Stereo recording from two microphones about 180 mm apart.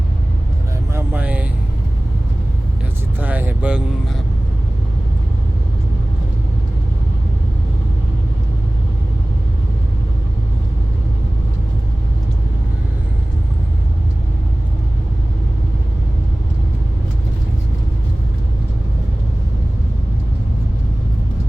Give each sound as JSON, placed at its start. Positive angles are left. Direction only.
{"t": 0.9, "sound": "vehicle", "side_deg": -10}
{"t": 3.2, "sound": "vehicle", "side_deg": -10}